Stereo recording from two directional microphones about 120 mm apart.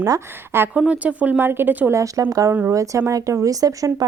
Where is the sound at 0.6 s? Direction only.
10° right (ahead or behind); by 4.0 s 30° right (ahead or behind).